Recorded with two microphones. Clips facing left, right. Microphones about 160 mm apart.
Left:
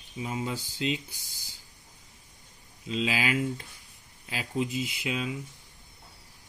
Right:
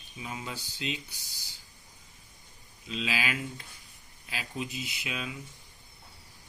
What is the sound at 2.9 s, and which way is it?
Speech, 35° left (ahead or behind).